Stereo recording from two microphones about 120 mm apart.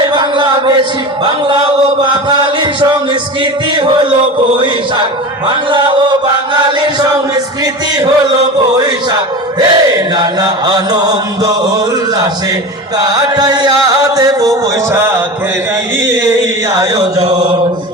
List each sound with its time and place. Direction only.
0.1 s a sound: 40° right (ahead or behind)
6.5 s chant: 35° right (ahead or behind)
9.6 s chant: 35° right (ahead or behind)
13.0 s chant: 35° right (ahead or behind)
14.9 s a sound: 20° right (ahead or behind)
16.7 s chant: 30° right (ahead or behind)